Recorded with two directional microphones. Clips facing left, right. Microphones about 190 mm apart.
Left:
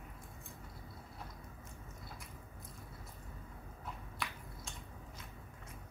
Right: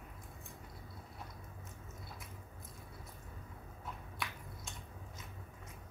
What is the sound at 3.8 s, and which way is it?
Finger snapping, centre (ahead or behind).